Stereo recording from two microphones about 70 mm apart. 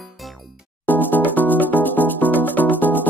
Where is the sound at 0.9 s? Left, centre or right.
Left.